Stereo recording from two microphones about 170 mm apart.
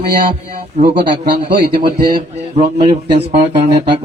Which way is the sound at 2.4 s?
40° right (ahead or behind).